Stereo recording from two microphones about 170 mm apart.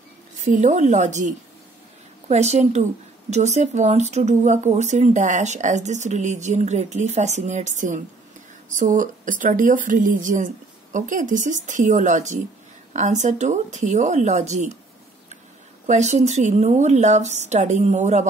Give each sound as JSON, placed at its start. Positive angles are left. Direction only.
{"t": 0.5, "sound": "a woman's voice", "side_deg": -45}
{"t": 15.9, "sound": "speech", "side_deg": -40}